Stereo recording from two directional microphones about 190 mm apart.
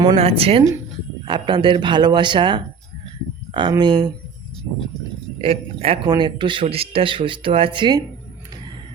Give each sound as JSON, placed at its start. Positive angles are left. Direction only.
{"t": 0.0, "sound": "speech", "side_deg": -30}
{"t": 5.4, "sound": "speech", "side_deg": -30}